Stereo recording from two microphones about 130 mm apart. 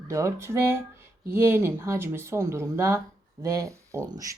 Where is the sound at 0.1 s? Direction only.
20° right (ahead or behind).